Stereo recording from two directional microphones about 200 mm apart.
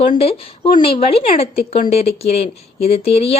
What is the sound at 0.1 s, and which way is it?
A woman's voice, 30° left (ahead or behind).